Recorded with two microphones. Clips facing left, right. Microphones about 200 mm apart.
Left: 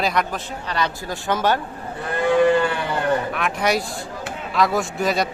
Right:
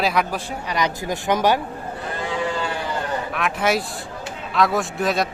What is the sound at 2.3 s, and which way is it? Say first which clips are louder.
Livestock: left 10 dB; 60° left (ahead or behind).